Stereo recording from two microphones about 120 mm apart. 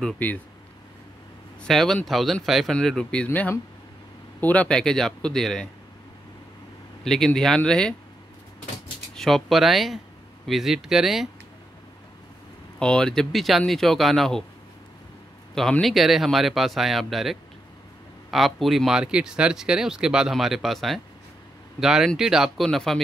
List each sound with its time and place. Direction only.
1.6 s speech: 5° left (ahead or behind)
7.1 s speech: 5° left (ahead or behind)
9.1 s speech: centre (ahead or behind)
12.7 s speech: 5° left (ahead or behind)
15.8 s speech: centre (ahead or behind)